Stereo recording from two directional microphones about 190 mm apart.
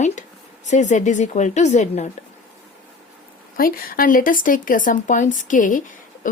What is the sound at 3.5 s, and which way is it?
Speech, 50° left (ahead or behind).